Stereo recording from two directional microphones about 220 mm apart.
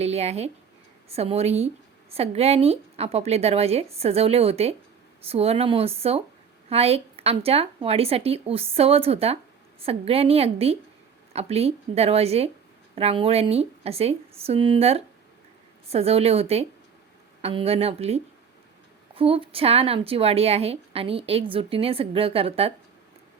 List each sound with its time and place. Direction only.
0.0 s a woman's voice: 30° right (ahead or behind)